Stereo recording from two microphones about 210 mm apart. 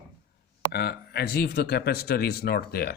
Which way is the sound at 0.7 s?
50° left (ahead or behind).